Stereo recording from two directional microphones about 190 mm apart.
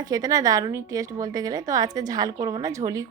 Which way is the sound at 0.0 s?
20° right (ahead or behind).